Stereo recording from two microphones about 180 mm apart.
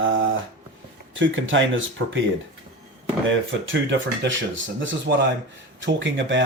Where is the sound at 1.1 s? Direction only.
90° right.